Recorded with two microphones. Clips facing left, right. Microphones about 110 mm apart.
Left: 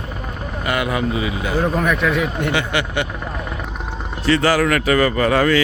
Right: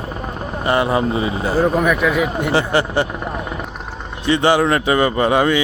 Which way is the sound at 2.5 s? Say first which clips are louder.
Right 4 dB; 35° right (ahead or behind).